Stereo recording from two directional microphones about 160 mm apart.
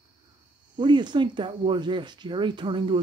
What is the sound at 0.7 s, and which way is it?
Speech, 30° right (ahead or behind).